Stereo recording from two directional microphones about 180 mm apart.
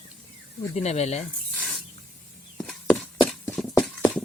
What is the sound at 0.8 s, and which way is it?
Speech, 35° left (ahead or behind).